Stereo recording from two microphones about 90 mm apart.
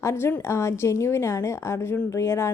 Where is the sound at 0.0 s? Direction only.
30° left (ahead or behind).